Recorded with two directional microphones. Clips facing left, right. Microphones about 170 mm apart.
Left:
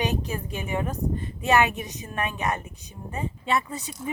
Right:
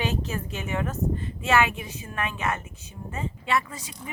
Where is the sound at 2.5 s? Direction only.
15° left (ahead or behind).